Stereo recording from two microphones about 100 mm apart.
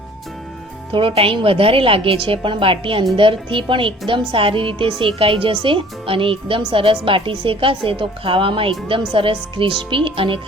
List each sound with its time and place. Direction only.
0.9 s a woman's voice: 65° right (ahead or behind)